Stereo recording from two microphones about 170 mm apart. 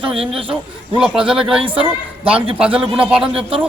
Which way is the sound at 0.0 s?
35° right (ahead or behind).